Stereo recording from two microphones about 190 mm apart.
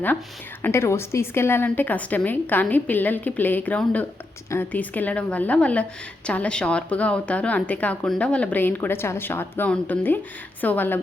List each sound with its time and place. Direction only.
0.6 s a woman's voice: 15° left (ahead or behind)